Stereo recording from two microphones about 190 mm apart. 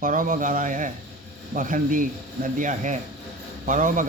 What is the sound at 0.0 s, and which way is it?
A man's voice, 45° right (ahead or behind).